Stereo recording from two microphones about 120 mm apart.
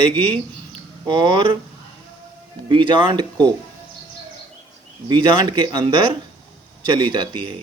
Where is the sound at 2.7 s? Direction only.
40° right (ahead or behind).